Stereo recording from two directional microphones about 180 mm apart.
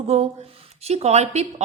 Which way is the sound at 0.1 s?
35° right (ahead or behind).